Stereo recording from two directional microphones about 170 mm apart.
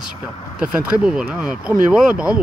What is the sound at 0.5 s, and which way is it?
Speech, 5° right (ahead or behind).